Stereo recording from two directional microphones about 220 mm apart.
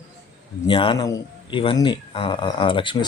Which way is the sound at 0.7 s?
20° left (ahead or behind).